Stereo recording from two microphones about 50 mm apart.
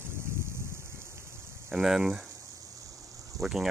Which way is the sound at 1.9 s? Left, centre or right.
Centre.